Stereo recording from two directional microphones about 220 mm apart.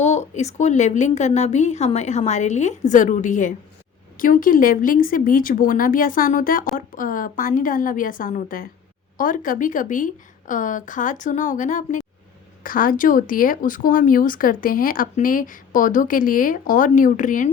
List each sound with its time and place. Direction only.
0.0 s speech: 30° left (ahead or behind)